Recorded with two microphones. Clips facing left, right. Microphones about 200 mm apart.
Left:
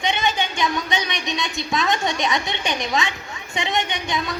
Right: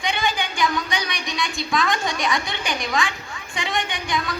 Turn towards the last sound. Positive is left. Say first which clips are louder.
# left 1 dB
turn(degrees=20)  # may be behind; listen again after turning